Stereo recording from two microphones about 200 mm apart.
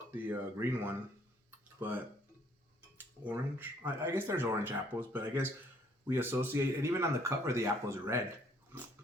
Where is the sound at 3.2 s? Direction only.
10° right (ahead or behind).